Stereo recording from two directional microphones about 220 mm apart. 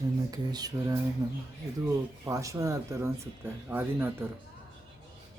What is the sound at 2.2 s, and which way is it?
Speech, 15° right (ahead or behind).